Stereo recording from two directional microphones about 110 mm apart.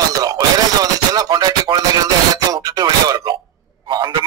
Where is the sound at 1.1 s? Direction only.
35° right (ahead or behind).